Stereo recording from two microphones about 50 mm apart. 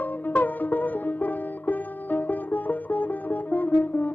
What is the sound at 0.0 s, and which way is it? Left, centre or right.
Music, left.